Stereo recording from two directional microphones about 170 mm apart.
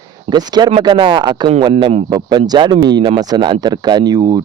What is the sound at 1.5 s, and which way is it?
Speech, 35° right (ahead or behind).